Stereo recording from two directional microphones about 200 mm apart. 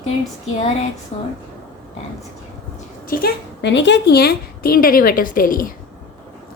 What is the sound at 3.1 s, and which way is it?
A woman's voice, 55° left (ahead or behind).